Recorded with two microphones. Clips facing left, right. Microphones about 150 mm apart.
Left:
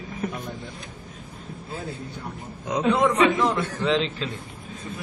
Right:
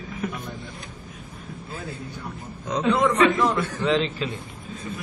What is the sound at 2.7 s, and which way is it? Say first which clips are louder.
Speech: even; 15° left (ahead or behind).